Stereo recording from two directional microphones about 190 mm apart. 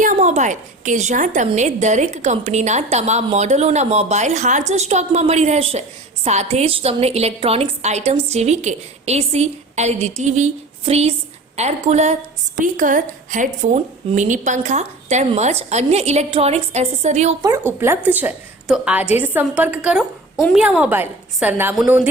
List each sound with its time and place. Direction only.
0.0 s a woman's voice: 40° right (ahead or behind)
17.4 s a woman's voice: 10° right (ahead or behind)